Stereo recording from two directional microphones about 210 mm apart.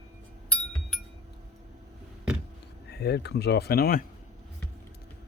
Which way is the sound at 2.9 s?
50° left (ahead or behind).